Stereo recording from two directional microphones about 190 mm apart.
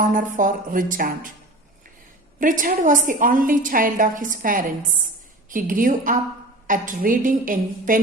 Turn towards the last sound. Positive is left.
turn(degrees=-45)  # may be behind; listen again after turning